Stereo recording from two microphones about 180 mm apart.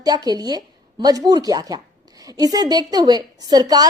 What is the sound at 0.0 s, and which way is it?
A woman's voice, 20° right (ahead or behind).